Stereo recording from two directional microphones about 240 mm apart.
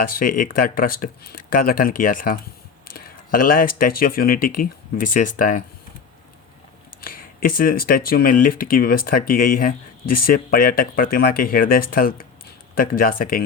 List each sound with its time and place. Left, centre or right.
0.0 s speech: left
2.9 s a sound: left
3.8 s speech: left
7.0 s speech: left